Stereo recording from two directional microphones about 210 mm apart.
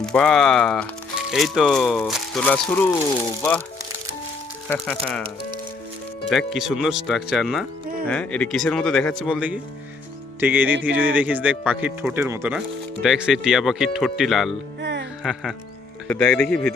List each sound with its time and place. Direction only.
0.0 s speech: 5° left (ahead or behind)
4.7 s speech: 5° left (ahead or behind)
6.3 s speech: centre (ahead or behind)
10.4 s music: 10° right (ahead or behind)
10.8 s speech: 10° right (ahead or behind)
14.8 s music: 55° right (ahead or behind)
15.2 s speech: centre (ahead or behind)